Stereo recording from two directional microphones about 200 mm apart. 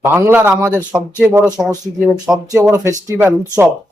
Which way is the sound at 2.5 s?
15° right (ahead or behind).